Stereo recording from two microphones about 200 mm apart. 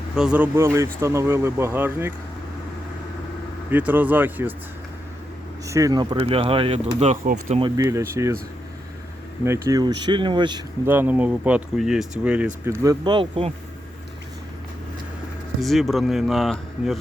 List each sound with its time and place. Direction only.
0.2 s speech: 5° right (ahead or behind)
3.7 s speech: 10° right (ahead or behind)
5.6 s speech: 15° right (ahead or behind); by 7.6 s 35° right (ahead or behind)
7.6 s speech: 15° right (ahead or behind)
9.4 s speech: 15° right (ahead or behind)
10.8 s speech: 10° right (ahead or behind); by 13.5 s 25° right (ahead or behind)
15.6 s speech: centre (ahead or behind)